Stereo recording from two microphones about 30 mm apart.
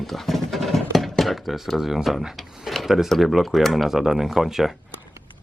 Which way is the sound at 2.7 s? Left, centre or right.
Centre.